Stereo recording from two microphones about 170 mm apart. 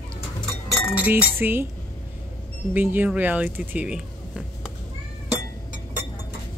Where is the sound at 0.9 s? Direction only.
10° right (ahead or behind).